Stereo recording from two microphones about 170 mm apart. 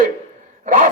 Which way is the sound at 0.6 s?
55° right (ahead or behind).